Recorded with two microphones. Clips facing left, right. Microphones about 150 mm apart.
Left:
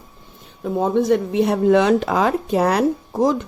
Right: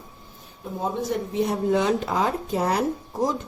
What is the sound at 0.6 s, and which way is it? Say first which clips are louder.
Speech: left 9 dB; 70° left (ahead or behind).